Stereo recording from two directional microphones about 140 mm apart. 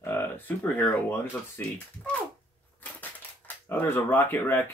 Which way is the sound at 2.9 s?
10° left (ahead or behind).